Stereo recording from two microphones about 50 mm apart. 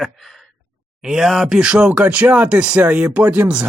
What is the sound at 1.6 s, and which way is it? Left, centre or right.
Speech, centre.